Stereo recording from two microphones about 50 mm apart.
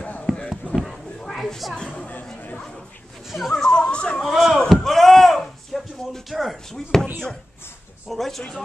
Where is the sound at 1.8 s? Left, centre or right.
Centre.